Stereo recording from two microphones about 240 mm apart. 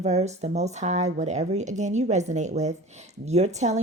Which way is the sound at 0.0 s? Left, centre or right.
Right.